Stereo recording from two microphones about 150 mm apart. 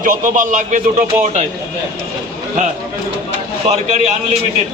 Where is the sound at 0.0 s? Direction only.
60° right (ahead or behind).